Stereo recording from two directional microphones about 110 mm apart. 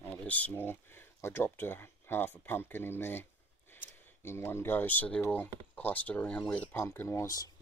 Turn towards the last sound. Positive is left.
turn(degrees=35)  # may be behind; listen again after turning